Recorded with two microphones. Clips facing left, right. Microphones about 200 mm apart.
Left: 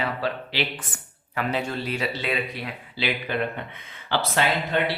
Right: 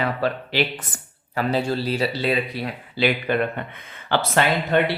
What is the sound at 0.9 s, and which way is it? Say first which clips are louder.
Speech: right 4 dB; 40° right (ahead or behind).